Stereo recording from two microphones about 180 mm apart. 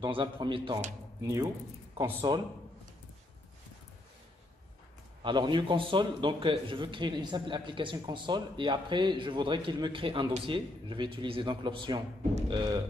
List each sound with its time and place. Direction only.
0.0 s a man's voice: 25° right (ahead or behind)
1.2 s a man's voice: 15° right (ahead or behind)
5.2 s a man's voice: 25° right (ahead or behind)